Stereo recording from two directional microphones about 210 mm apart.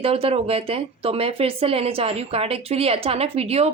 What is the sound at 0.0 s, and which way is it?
Speech, 25° right (ahead or behind).